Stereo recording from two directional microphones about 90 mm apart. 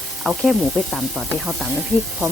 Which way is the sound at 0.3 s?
5° right (ahead or behind).